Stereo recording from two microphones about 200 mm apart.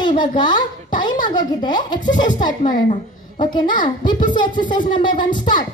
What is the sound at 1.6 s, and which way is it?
A woman's voice, 20° left (ahead or behind).